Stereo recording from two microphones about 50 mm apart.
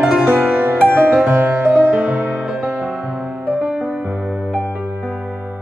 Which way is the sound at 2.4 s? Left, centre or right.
Centre.